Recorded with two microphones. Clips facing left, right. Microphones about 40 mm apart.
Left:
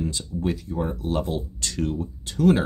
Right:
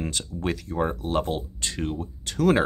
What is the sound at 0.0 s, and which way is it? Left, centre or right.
Speech, right.